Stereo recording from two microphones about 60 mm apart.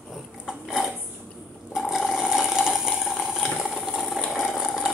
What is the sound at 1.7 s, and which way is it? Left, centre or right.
Ratchet, centre.